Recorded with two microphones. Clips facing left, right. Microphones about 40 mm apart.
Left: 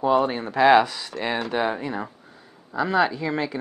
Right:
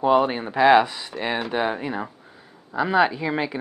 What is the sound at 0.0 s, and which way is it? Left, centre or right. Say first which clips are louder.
Speech: right 2 dB; centre.